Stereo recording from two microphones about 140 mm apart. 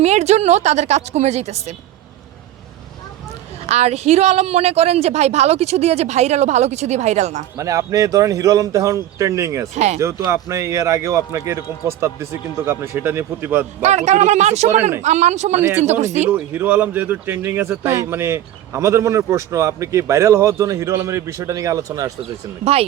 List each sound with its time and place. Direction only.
0.0 s a woman's voice: 50° right (ahead or behind)
3.7 s a woman's voice: 50° right (ahead or behind)
7.5 s speech: 20° right (ahead or behind)
9.7 s a woman's voice: 50° right (ahead or behind)
10.0 s speech: 20° right (ahead or behind)
13.8 s a woman's voice: 55° right (ahead or behind)
16.3 s speech: 15° right (ahead or behind)